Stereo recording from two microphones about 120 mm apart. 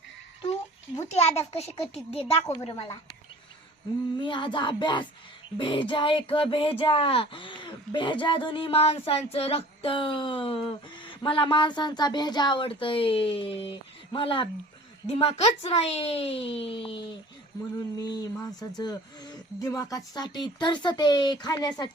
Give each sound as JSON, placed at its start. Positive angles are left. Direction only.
{"t": 0.9, "sound": "a child's voice", "side_deg": 60}
{"t": 2.8, "sound": "speech", "side_deg": 35}
{"t": 4.2, "sound": "speech", "side_deg": 40}
{"t": 15.0, "sound": "speech", "side_deg": 60}
{"t": 17.7, "sound": "speech", "side_deg": 35}